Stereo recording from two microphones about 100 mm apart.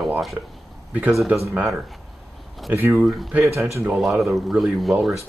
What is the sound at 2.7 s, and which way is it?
Speech, 20° right (ahead or behind).